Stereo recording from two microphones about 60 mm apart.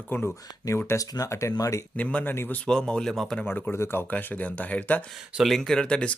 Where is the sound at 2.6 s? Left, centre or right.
Centre.